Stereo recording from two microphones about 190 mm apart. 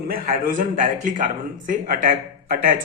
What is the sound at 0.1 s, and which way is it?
Speech, 45° right (ahead or behind).